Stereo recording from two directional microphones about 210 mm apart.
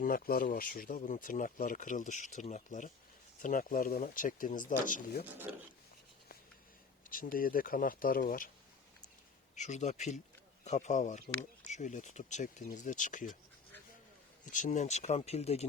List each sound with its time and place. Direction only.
0.0 s speech: 45° left (ahead or behind)
7.1 s speech: 40° left (ahead or behind)
9.6 s speech: 35° left (ahead or behind)
14.4 s speech: 35° left (ahead or behind)